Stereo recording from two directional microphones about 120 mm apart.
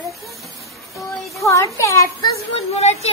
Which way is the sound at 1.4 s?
25° left (ahead or behind).